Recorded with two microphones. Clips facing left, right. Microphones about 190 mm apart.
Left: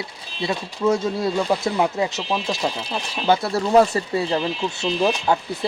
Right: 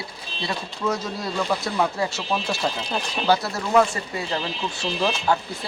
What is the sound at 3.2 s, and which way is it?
Speech, 25° left (ahead or behind).